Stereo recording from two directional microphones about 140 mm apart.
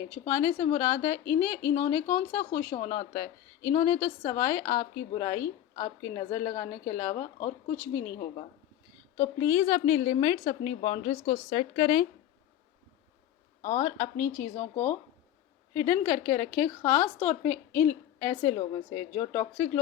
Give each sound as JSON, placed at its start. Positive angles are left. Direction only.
{"t": 0.3, "sound": "speech", "side_deg": 25}
{"t": 9.1, "sound": "a woman's voice", "side_deg": 25}
{"t": 13.6, "sound": "speech", "side_deg": 30}
{"t": 15.7, "sound": "a woman's voice", "side_deg": 25}